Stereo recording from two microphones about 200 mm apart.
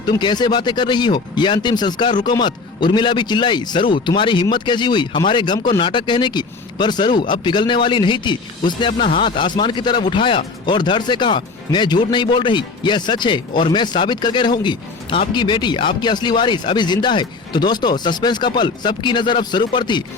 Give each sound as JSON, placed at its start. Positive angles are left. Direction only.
{"t": 0.0, "sound": "speech", "side_deg": 20}